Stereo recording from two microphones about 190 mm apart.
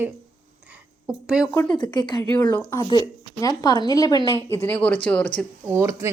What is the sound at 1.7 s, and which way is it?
A woman's voice, 25° left (ahead or behind).